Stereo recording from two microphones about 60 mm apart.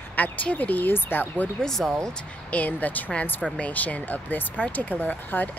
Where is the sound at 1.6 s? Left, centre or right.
Centre.